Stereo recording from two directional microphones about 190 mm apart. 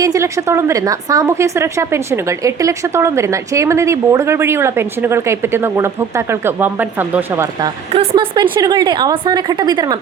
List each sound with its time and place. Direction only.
0.0 s a woman's voice: 15° right (ahead or behind)
7.9 s a woman's voice: 25° right (ahead or behind)